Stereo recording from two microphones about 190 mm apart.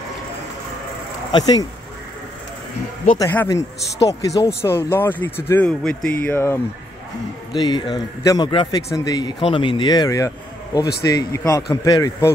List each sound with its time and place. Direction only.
1.3 s speech: 20° left (ahead or behind)
3.2 s speech: 15° left (ahead or behind)
7.5 s speech: 20° left (ahead or behind)